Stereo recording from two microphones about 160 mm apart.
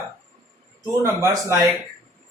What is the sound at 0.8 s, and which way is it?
Speech, 20° right (ahead or behind).